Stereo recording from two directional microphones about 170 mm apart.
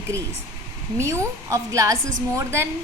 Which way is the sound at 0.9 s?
15° right (ahead or behind).